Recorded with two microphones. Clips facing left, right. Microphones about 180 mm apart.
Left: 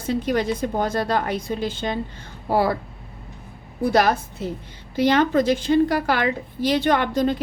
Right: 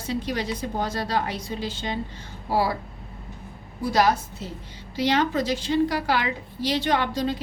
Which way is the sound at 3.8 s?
55° left (ahead or behind).